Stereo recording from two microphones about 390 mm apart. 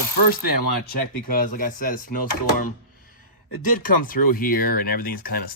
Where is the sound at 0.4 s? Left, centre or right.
Left.